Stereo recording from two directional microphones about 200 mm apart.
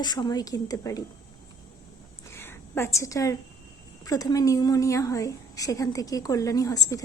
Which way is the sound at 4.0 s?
20° left (ahead or behind).